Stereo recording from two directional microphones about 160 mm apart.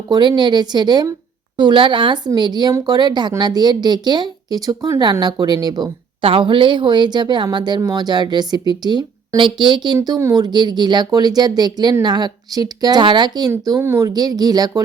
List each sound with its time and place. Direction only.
0.1 s speech: 30° right (ahead or behind)
13.5 s speech: 15° right (ahead or behind)